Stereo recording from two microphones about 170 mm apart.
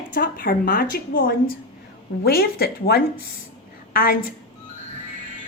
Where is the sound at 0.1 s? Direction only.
60° left (ahead or behind).